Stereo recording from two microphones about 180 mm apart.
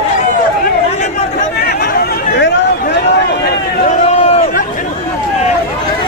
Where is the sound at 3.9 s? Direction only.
35° left (ahead or behind).